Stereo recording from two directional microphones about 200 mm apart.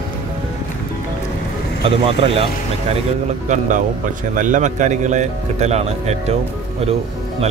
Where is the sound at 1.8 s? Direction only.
30° right (ahead or behind).